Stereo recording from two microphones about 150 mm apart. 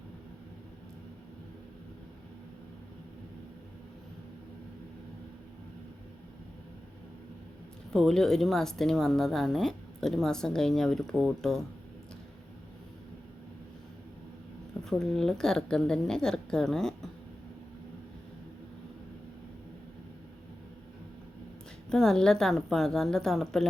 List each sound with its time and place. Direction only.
7.9 s a woman's voice: centre (ahead or behind)
14.8 s a woman's voice: 5° left (ahead or behind)
21.8 s a woman's voice: 5° left (ahead or behind)